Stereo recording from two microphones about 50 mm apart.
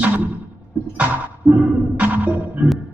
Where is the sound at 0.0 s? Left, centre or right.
Right.